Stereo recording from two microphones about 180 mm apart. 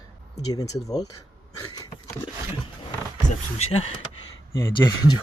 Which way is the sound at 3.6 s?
35° left (ahead or behind).